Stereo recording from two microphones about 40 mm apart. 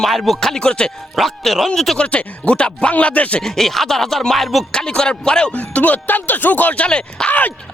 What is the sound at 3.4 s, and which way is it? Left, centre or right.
Speech, centre.